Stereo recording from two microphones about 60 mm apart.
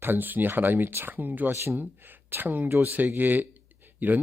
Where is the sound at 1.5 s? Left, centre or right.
Right.